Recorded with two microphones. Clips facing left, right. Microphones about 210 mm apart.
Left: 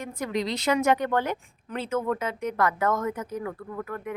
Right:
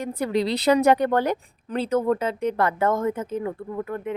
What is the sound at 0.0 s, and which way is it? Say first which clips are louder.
A woman's voice: right 5 dB; 35° right (ahead or behind).